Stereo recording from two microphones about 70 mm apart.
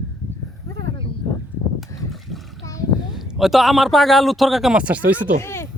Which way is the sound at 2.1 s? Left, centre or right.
Centre.